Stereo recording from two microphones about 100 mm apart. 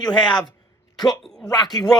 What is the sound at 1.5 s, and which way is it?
Speech, 45° left (ahead or behind).